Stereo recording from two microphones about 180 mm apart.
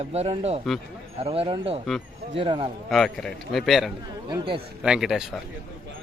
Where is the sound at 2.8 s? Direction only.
Centre (ahead or behind).